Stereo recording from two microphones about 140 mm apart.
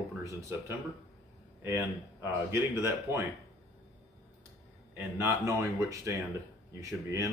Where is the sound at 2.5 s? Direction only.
20° right (ahead or behind).